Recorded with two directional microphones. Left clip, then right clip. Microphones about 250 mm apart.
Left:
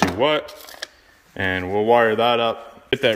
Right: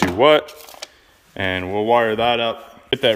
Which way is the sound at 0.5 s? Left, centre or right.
Right.